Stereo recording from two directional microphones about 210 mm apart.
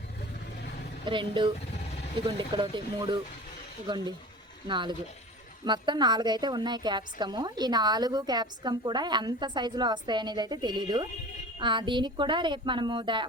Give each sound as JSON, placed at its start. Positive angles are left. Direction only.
{"t": 1.0, "sound": "a woman's voice", "side_deg": -20}
{"t": 2.6, "sound": "a woman's voice", "side_deg": -20}